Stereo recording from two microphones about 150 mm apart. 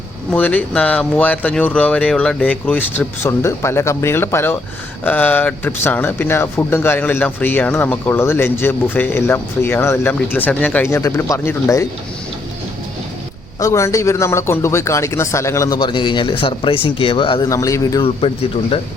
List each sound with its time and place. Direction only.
0.3 s speech: 10° left (ahead or behind)
13.6 s a man's voice: 20° left (ahead or behind)